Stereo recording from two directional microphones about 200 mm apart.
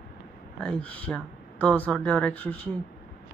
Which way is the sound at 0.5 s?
5° left (ahead or behind).